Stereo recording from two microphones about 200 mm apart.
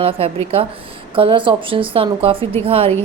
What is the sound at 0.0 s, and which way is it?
A woman's voice, 30° right (ahead or behind).